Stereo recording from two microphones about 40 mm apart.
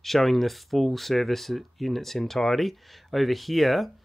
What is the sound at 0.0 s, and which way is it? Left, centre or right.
Speech, centre.